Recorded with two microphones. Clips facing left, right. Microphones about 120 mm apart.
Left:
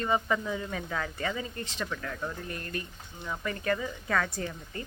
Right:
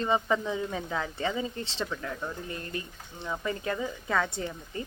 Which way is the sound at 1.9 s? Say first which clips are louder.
Right 1 dB; 20° right (ahead or behind).